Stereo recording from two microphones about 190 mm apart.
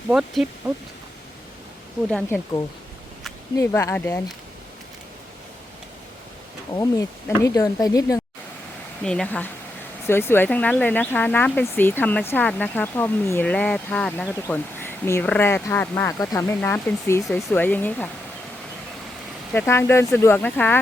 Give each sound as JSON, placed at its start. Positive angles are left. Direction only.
{"t": 0.1, "sound": "speech", "side_deg": -5}
{"t": 2.0, "sound": "speech", "side_deg": 5}
{"t": 3.6, "sound": "speech", "side_deg": 15}
{"t": 6.7, "sound": "speech", "side_deg": 15}
{"t": 9.0, "sound": "speech", "side_deg": 5}
{"t": 19.5, "sound": "speech", "side_deg": 15}